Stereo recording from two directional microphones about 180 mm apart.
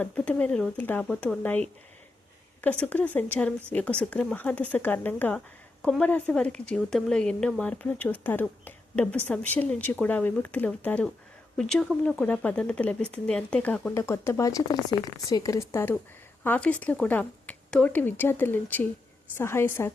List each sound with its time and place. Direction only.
0.0 s speech: 10° left (ahead or behind)